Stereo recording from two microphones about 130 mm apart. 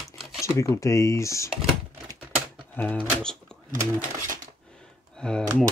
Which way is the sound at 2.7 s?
15° left (ahead or behind).